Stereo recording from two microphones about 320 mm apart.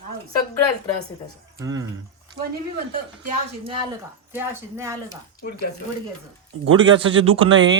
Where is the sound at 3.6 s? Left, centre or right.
Centre.